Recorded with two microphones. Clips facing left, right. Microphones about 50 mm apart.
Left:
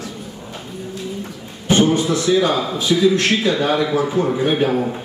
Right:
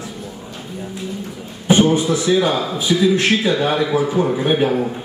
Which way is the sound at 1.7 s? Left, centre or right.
Centre.